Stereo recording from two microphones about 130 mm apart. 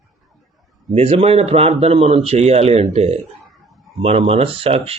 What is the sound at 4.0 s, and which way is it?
Speech, 50° right (ahead or behind).